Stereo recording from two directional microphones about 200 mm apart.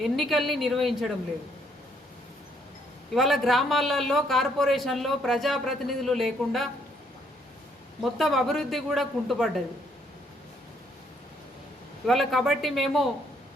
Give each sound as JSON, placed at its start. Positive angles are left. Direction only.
{"t": 0.0, "sound": "speech", "side_deg": 0}
{"t": 3.2, "sound": "speech", "side_deg": 0}
{"t": 8.2, "sound": "speech", "side_deg": 0}
{"t": 12.0, "sound": "speech", "side_deg": 0}